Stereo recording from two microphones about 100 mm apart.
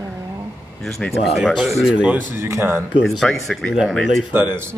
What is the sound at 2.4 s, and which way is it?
Speech, 30° right (ahead or behind).